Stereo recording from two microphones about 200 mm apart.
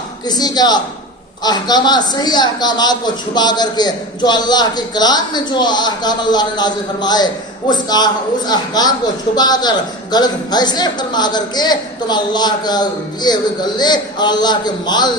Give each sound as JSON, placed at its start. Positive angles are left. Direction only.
{"t": 0.3, "sound": "a man's voice", "side_deg": 20}